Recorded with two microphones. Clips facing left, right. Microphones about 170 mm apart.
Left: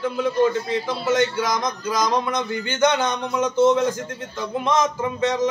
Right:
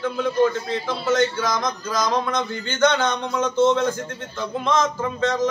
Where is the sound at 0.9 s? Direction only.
15° left (ahead or behind).